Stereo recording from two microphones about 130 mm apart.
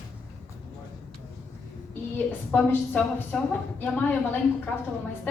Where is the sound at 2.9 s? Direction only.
15° left (ahead or behind).